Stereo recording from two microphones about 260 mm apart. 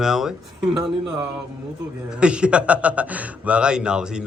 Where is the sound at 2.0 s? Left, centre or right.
Centre.